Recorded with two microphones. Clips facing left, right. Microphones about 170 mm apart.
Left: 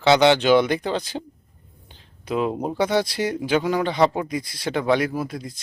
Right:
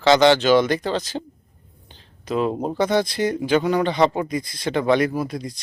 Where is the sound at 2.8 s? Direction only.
10° left (ahead or behind).